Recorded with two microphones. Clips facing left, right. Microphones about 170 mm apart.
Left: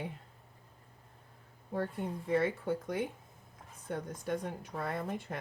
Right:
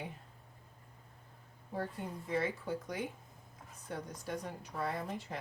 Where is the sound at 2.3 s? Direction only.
55° left (ahead or behind).